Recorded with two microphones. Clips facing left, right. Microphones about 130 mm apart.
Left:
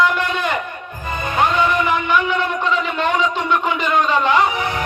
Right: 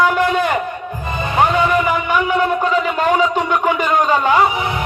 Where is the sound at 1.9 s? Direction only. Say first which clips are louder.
Right 1 dB; 40° right (ahead or behind).